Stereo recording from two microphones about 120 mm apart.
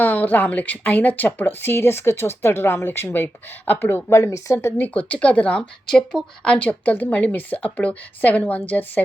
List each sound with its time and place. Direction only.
0.0 s speech: 15° left (ahead or behind)